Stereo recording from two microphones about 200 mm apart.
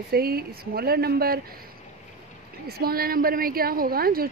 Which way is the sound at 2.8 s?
50° right (ahead or behind).